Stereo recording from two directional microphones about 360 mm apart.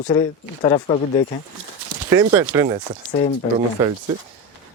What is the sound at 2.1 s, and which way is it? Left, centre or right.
Speech, centre.